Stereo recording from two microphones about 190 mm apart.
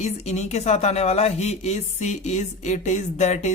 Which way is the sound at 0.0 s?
35° left (ahead or behind).